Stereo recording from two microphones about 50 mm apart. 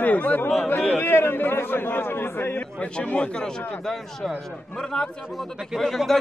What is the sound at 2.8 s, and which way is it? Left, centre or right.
Speech, left.